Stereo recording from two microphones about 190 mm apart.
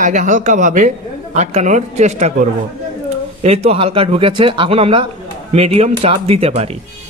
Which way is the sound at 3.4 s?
35° right (ahead or behind).